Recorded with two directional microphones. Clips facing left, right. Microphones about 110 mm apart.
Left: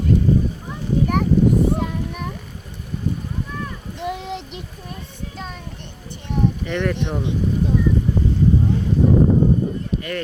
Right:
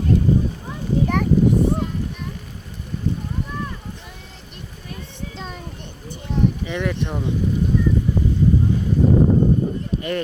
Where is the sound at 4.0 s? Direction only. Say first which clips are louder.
Left 15 dB; 75° left (ahead or behind).